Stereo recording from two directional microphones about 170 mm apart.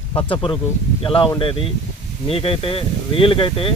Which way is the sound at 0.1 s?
30° left (ahead or behind).